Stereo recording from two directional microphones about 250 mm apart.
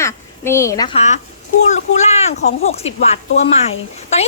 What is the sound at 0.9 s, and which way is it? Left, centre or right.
A woman's voice, left.